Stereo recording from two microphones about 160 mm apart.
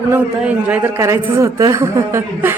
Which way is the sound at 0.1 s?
10° right (ahead or behind).